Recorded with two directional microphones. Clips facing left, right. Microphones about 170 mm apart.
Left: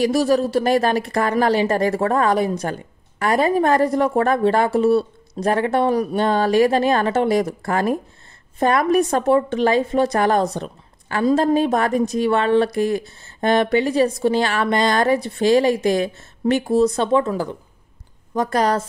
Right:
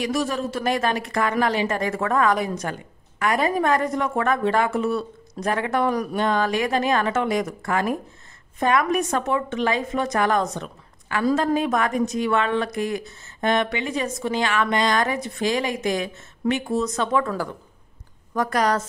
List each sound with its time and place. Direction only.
0.0 s a woman's voice: 35° left (ahead or behind)